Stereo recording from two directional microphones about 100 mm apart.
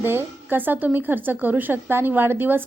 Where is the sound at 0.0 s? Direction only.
20° right (ahead or behind).